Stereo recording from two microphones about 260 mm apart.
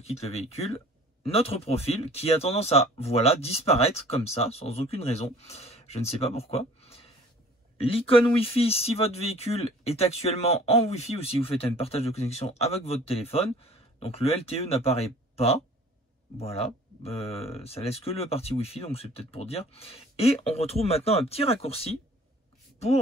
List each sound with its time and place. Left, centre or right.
0.0 s speech: left